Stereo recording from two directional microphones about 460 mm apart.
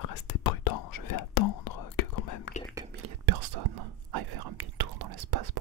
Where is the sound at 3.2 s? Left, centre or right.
Right.